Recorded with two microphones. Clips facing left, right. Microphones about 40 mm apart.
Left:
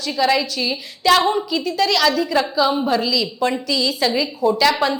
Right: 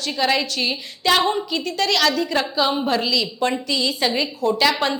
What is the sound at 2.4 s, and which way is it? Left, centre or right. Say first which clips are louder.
Speech: left 3 dB; right.